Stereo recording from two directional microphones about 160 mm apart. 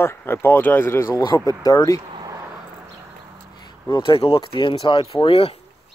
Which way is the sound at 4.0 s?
35° left (ahead or behind).